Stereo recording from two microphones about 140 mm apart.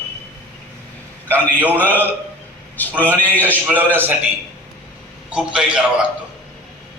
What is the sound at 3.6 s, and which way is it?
Speech, 15° right (ahead or behind).